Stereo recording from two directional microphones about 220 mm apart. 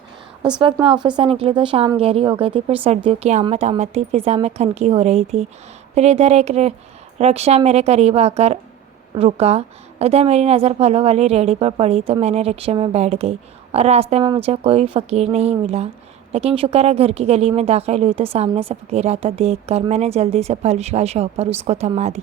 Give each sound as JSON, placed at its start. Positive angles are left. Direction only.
{"t": 0.6, "sound": "speech", "side_deg": -25}